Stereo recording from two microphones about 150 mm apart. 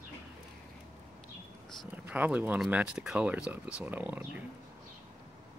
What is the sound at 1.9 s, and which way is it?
Speech, 10° right (ahead or behind).